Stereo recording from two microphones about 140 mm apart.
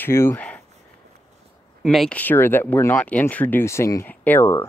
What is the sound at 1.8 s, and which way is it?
Speech, centre (ahead or behind).